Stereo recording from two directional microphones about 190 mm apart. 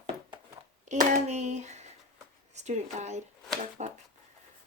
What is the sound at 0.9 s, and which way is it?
Speech, 40° right (ahead or behind).